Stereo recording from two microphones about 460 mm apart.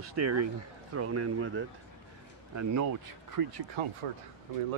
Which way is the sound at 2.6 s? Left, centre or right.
Right.